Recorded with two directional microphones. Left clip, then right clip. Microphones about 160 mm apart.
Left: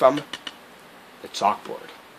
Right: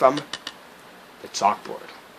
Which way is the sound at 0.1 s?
20° right (ahead or behind).